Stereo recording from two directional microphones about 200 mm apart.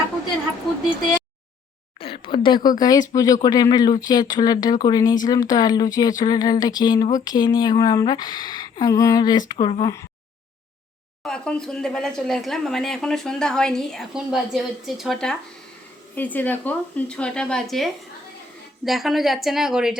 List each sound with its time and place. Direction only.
2.0 s a sound: 25° left (ahead or behind)
2.6 s speech: 20° left (ahead or behind)
11.2 s speech: 5° left (ahead or behind)